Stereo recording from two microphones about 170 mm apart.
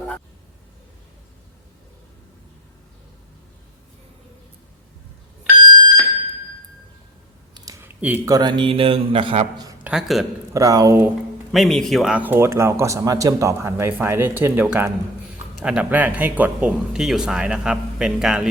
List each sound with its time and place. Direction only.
5.6 s alarm: 25° right (ahead or behind)
7.5 s a sound: 20° right (ahead or behind)
8.3 s a man's voice: 25° right (ahead or behind)
9.8 s a man's voice: centre (ahead or behind)
10.5 s speech: 20° right (ahead or behind)
11.5 s a man's voice: centre (ahead or behind)